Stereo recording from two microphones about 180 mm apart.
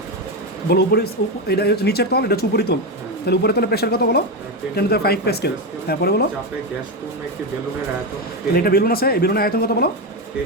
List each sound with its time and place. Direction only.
0.7 s a man's voice: 60° left (ahead or behind)
8.5 s a man's voice: 60° left (ahead or behind)